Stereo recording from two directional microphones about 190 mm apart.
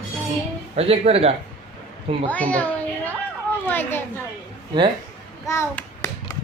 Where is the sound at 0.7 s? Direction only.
30° right (ahead or behind).